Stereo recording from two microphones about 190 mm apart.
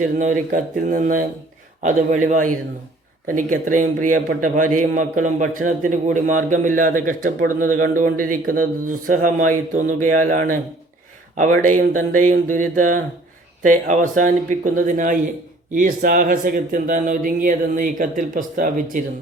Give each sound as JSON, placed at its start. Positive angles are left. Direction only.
{"t": 0.2, "sound": "a man's voice", "side_deg": -40}